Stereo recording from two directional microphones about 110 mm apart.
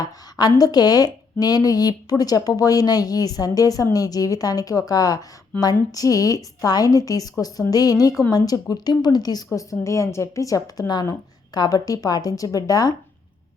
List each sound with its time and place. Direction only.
0.0 s a woman's voice: 35° left (ahead or behind)